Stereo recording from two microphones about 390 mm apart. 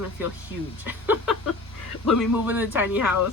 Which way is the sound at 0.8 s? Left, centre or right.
Centre.